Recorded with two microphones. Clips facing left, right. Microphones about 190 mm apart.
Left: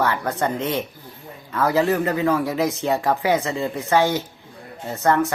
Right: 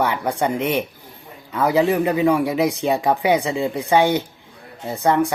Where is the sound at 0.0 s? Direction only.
15° right (ahead or behind).